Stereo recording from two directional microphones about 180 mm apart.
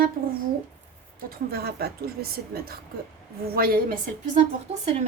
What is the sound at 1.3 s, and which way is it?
A woman's voice, 60° right (ahead or behind).